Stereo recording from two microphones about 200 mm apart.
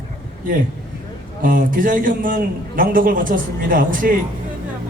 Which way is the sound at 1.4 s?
45° right (ahead or behind).